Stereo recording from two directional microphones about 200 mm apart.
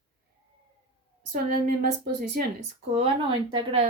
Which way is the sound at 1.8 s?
50° right (ahead or behind).